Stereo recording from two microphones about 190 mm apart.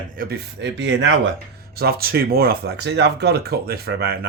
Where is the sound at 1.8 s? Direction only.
55° right (ahead or behind).